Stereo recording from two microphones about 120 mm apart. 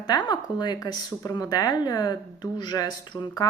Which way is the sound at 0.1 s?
35° left (ahead or behind).